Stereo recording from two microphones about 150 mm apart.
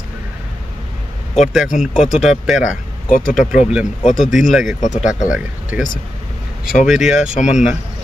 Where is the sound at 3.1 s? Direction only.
60° left (ahead or behind).